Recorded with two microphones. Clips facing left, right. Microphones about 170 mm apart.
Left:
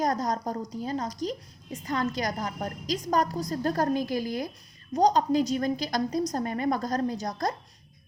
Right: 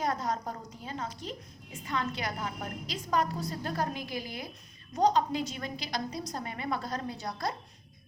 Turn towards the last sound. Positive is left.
turn(degrees=40)  # may be behind; listen again after turning